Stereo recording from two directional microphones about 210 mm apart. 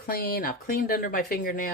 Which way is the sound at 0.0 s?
45° left (ahead or behind).